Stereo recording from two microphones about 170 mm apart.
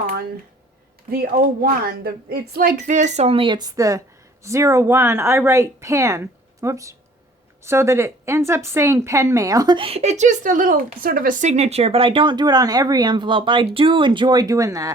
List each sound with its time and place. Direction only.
1.1 s a woman's voice: 65° right (ahead or behind); by 14.9 s 20° right (ahead or behind)